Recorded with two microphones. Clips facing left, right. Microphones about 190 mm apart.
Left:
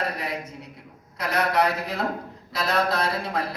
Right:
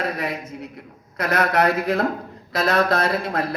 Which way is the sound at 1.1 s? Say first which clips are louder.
Right 3 dB; 50° right (ahead or behind).